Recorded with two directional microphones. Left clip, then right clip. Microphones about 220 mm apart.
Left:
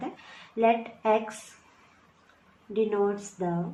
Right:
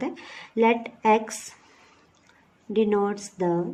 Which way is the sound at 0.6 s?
55° right (ahead or behind).